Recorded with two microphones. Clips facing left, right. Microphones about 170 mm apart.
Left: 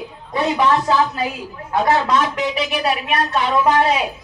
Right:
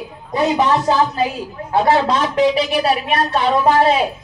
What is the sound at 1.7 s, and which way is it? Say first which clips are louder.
A woman's voice: right 2 dB; 30° right (ahead or behind).